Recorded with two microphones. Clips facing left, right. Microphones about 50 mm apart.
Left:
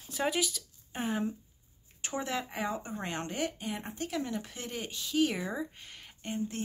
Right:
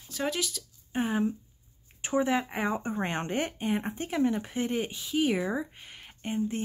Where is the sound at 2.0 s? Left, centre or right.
Centre.